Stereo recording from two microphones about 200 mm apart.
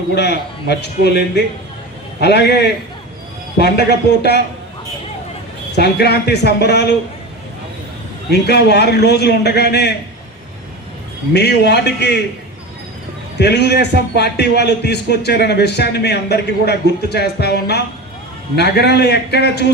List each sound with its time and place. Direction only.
0.1 s a man's voice: 55° left (ahead or behind)
2.2 s a man's voice: 55° left (ahead or behind)
3.6 s a man's voice: 55° left (ahead or behind)
5.8 s a man's voice: 55° left (ahead or behind)
8.3 s a man's voice: 55° left (ahead or behind)
11.3 s a man's voice: 55° left (ahead or behind)
13.4 s a man's voice: 55° left (ahead or behind)